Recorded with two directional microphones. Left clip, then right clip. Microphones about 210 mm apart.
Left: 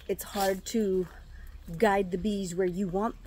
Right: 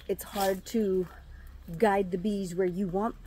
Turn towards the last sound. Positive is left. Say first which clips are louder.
# even
turn(degrees=5)  # may be behind; listen again after turning